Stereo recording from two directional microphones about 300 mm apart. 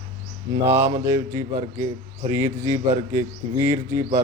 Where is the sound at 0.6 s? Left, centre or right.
Centre.